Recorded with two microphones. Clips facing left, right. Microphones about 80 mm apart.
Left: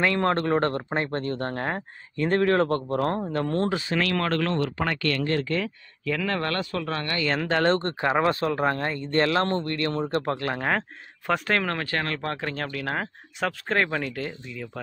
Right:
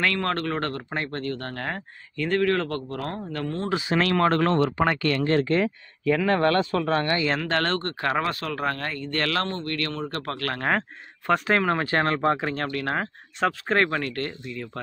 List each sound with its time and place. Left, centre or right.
0.0 s speech: left
4.0 s speech: right
4.8 s speech: right
5.4 s speech: right
7.4 s speech: centre
11.2 s speech: centre
11.8 s speech: right
12.4 s speech: centre